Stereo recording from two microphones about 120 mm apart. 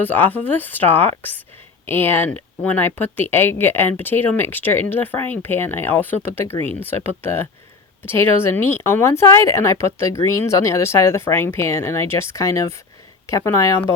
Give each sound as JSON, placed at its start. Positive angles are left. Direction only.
{"t": 0.0, "sound": "speech", "side_deg": 15}